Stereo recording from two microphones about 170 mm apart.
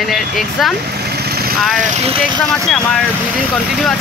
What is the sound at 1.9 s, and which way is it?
Speech, 40° right (ahead or behind).